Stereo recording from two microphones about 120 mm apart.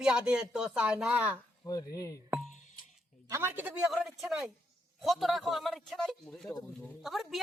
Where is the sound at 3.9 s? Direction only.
5° right (ahead or behind).